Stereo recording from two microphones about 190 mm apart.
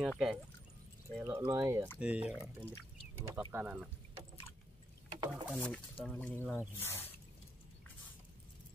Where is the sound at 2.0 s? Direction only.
5° right (ahead or behind).